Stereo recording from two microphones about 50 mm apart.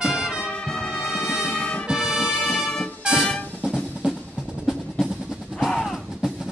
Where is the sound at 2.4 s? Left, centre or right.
Centre.